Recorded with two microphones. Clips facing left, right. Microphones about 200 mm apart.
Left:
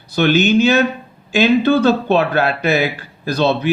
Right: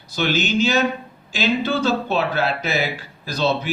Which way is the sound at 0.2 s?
60° left (ahead or behind).